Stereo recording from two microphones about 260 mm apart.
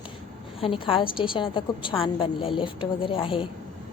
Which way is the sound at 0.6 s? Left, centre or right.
Left.